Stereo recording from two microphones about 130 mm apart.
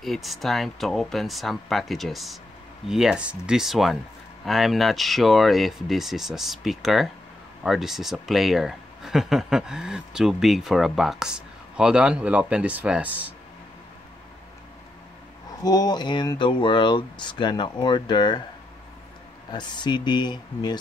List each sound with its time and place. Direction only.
0.0 s speech: centre (ahead or behind)
15.6 s speech: 30° left (ahead or behind)
19.5 s speech: 35° left (ahead or behind)